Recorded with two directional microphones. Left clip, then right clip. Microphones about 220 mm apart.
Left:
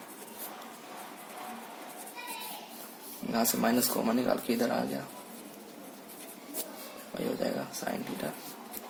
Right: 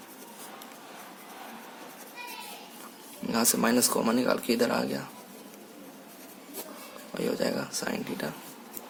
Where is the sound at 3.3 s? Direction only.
30° right (ahead or behind).